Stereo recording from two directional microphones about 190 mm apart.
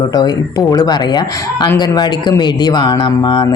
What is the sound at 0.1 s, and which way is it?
A man's voice, 20° left (ahead or behind).